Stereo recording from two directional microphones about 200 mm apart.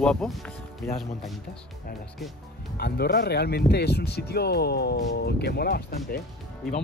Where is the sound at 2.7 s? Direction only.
55° left (ahead or behind).